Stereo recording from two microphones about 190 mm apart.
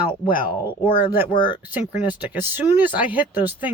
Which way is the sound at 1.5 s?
10° right (ahead or behind).